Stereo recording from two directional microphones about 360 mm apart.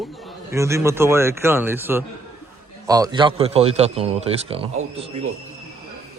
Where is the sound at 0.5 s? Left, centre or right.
Centre.